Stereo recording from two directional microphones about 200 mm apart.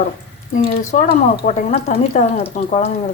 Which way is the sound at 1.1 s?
30° left (ahead or behind).